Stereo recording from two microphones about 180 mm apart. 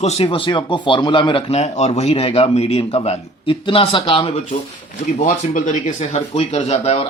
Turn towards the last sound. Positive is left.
turn(degrees=35)  # may be behind; listen again after turning